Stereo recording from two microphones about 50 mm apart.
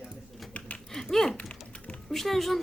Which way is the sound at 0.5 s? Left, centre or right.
Left.